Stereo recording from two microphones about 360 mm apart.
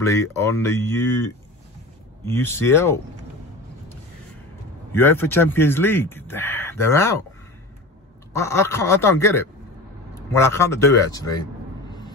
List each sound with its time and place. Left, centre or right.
0.0 s speech: centre
4.9 s speech: centre
8.3 s speech: centre